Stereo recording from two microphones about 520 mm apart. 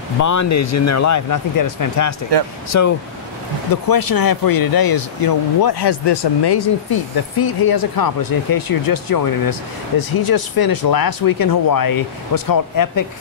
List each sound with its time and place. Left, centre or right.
0.2 s speech: left
3.9 s speech: left